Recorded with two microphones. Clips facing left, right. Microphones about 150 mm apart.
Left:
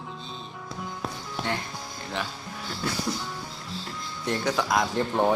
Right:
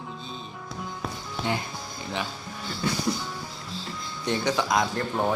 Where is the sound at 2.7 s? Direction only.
Centre (ahead or behind).